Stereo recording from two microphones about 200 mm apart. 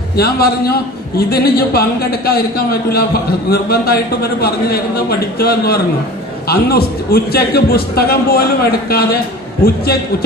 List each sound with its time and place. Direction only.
0.1 s a man's voice: 50° left (ahead or behind)